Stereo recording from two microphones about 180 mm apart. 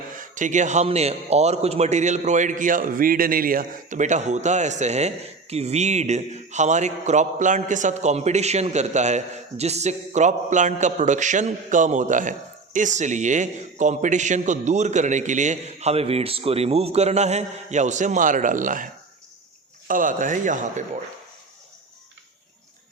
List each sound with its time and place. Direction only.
0.2 s a man's voice: 45° right (ahead or behind)
19.9 s speech: 50° right (ahead or behind)